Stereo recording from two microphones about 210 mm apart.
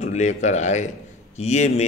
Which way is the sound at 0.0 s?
35° left (ahead or behind).